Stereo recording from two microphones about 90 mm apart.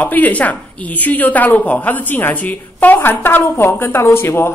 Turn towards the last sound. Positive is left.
turn(degrees=25)  # may be behind; listen again after turning